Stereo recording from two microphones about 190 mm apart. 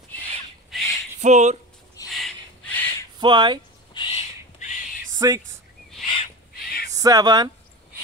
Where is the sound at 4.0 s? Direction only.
25° left (ahead or behind).